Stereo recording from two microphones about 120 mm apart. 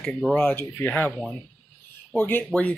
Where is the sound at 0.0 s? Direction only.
10° left (ahead or behind).